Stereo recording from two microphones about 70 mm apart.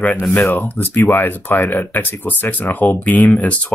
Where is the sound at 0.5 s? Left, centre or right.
Left.